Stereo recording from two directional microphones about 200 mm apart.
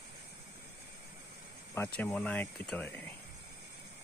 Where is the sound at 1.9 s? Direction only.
5° left (ahead or behind).